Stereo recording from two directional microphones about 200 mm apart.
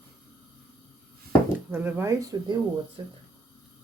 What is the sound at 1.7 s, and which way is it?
Speech, 10° right (ahead or behind).